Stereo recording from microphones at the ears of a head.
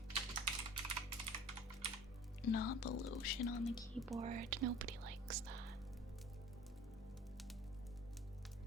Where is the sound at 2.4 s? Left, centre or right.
Left.